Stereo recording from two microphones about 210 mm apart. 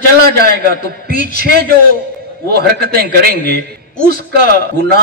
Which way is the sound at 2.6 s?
45° right (ahead or behind).